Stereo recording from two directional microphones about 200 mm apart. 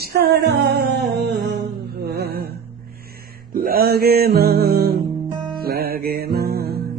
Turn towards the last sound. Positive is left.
turn(degrees=-50)  # may be behind; listen again after turning